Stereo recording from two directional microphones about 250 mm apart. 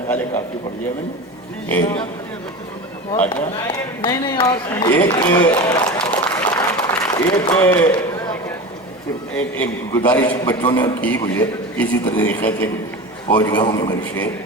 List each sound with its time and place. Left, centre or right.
1.7 s a man's voice: centre
3.7 s a man's voice: centre
9.3 s a man's voice: centre
13.2 s a man's voice: centre